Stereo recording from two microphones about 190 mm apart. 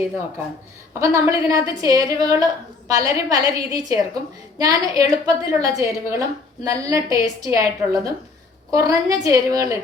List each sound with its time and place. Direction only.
0.9 s a woman's voice: 15° right (ahead or behind)